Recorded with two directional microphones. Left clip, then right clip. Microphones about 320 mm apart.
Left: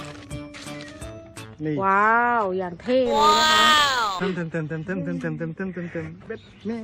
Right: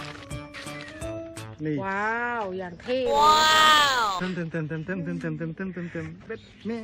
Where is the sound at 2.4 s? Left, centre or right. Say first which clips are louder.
Left 7 dB; left.